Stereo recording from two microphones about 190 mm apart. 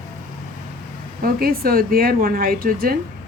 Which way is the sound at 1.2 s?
50° right (ahead or behind).